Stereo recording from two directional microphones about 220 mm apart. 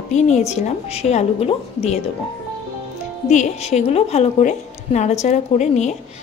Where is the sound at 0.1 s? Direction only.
30° left (ahead or behind).